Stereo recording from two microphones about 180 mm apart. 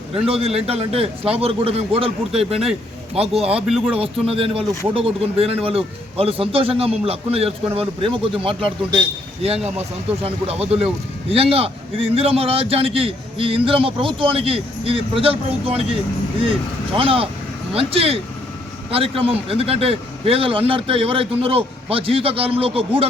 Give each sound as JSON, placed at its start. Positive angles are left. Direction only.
{"t": 0.1, "sound": "speech", "side_deg": -35}
{"t": 3.5, "sound": "speech", "side_deg": 0}
{"t": 4.0, "sound": "speech", "side_deg": -30}
{"t": 10.1, "sound": "speech", "side_deg": -35}
{"t": 17.0, "sound": "speech", "side_deg": -30}